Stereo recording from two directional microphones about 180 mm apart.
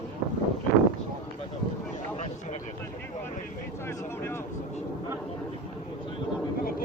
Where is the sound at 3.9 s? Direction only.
15° left (ahead or behind).